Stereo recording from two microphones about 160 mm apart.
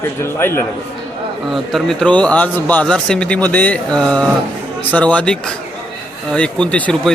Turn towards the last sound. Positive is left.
turn(degrees=5)  # may be behind; listen again after turning